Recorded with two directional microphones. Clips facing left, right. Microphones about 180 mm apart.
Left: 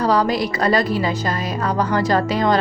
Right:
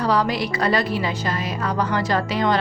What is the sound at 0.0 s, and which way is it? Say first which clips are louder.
A woman's voice: left 3 dB; 40° left (ahead or behind).